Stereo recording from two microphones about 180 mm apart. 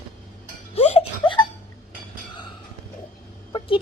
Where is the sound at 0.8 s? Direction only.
35° left (ahead or behind).